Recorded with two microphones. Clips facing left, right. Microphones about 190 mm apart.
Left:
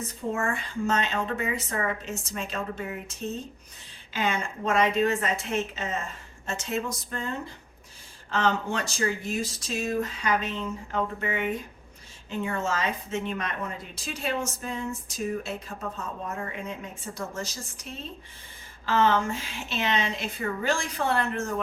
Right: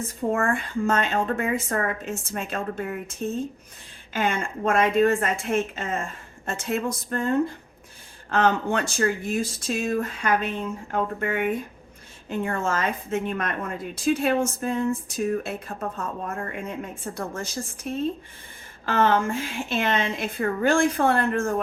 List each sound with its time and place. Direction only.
0.0 s a woman's voice: 55° right (ahead or behind)